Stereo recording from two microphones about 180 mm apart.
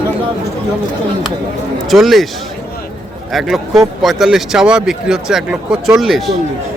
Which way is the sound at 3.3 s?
Centre (ahead or behind).